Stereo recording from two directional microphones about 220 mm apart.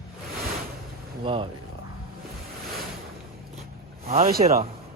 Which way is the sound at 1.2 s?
25° right (ahead or behind).